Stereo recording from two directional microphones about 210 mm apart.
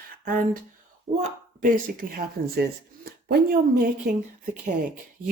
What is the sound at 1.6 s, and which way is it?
Speech, 40° right (ahead or behind).